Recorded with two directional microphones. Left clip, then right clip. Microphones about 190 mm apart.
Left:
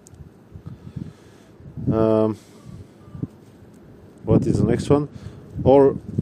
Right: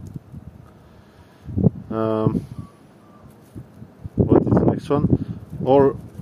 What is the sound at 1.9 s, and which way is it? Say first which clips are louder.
Speech: left 5 dB; 20° left (ahead or behind).